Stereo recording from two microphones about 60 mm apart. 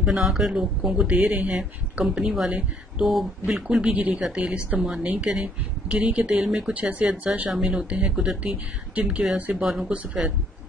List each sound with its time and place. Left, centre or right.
0.0 s speech: centre
0.6 s speech: centre
3.0 s speech: centre
3.5 s speech: centre
6.3 s speech: centre
6.7 s speech: right
7.5 s speech: centre
7.9 s speech: centre
9.5 s speech: centre